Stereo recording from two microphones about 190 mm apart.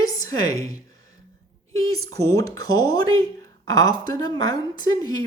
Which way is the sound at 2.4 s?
20° left (ahead or behind).